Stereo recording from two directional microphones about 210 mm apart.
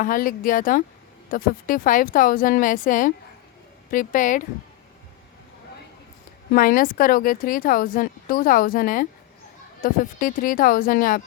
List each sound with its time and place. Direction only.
0.0 s a woman's voice: 40° left (ahead or behind)
6.5 s a woman's voice: 40° left (ahead or behind)